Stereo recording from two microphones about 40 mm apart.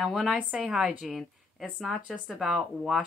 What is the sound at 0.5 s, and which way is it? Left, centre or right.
Speech, centre.